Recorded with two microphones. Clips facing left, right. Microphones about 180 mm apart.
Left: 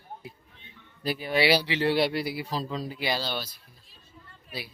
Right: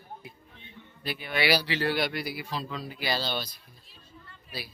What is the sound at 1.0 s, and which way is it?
Speech, 40° left (ahead or behind).